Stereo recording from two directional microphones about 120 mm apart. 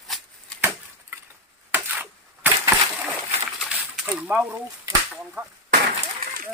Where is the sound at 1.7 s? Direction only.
15° right (ahead or behind).